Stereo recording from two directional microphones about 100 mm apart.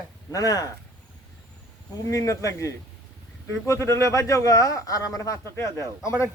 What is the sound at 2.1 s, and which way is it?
A man's voice, 30° left (ahead or behind).